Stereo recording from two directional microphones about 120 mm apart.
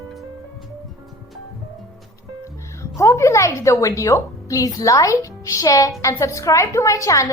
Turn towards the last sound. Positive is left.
turn(degrees=25)  # may be behind; listen again after turning